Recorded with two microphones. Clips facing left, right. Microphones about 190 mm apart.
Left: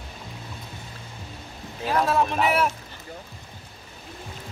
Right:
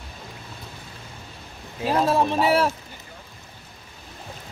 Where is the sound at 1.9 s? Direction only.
30° right (ahead or behind).